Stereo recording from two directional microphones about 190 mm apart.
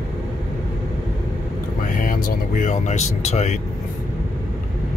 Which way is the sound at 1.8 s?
45° left (ahead or behind).